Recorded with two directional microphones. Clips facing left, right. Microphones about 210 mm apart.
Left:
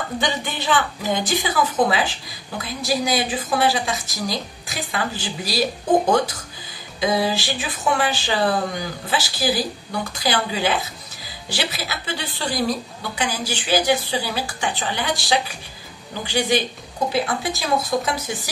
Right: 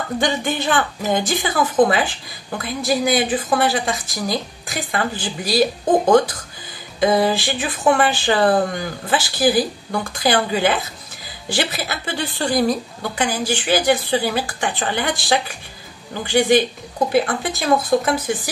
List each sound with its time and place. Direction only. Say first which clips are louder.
0.2 s a woman's voice: right 7 dB; 50° right (ahead or behind)
7.0 s a woman's voice: right 4 dB; 55° right (ahead or behind)